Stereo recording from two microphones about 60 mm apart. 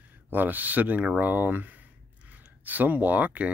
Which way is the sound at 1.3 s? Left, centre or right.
Right.